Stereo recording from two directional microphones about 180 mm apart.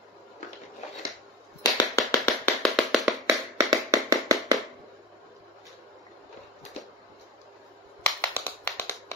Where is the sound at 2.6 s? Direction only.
Centre (ahead or behind).